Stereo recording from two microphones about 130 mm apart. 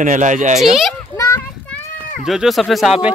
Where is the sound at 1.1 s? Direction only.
25° left (ahead or behind).